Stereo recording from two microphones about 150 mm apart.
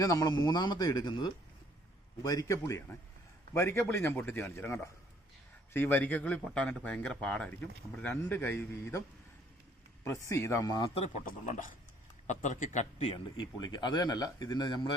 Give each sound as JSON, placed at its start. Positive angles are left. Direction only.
{"t": 0.0, "sound": "speech", "side_deg": 25}
{"t": 10.9, "sound": "a man's voice", "side_deg": 45}
{"t": 11.3, "sound": "a man's voice", "side_deg": 60}
{"t": 13.1, "sound": "speech", "side_deg": 30}